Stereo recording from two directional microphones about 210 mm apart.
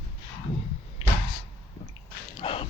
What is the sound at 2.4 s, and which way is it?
Dog, 25° left (ahead or behind).